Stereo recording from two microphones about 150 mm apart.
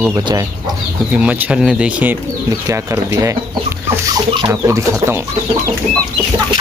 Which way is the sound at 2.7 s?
20° right (ahead or behind).